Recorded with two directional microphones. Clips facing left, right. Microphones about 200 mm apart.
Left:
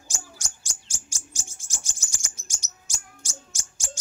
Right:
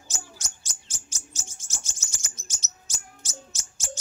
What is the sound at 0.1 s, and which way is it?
Bird, 10° left (ahead or behind).